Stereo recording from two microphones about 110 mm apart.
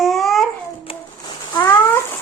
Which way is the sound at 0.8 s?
55° left (ahead or behind).